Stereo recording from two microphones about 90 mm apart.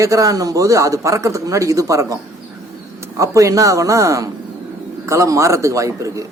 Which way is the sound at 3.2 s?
35° right (ahead or behind).